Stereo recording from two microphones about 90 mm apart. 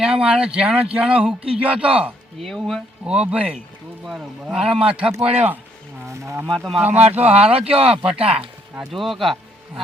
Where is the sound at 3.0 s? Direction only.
10° right (ahead or behind).